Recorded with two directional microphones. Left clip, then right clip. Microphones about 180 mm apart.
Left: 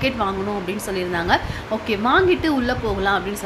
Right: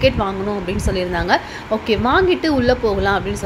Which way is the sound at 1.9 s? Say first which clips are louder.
Right 1 dB; 20° right (ahead or behind).